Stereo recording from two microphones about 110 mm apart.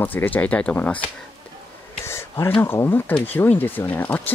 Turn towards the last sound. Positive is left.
turn(degrees=15)  # may be behind; listen again after turning